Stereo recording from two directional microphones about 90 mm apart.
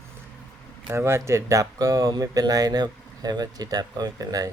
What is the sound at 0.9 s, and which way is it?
Speech, 30° right (ahead or behind).